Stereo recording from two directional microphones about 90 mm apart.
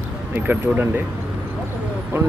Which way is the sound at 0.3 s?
20° right (ahead or behind).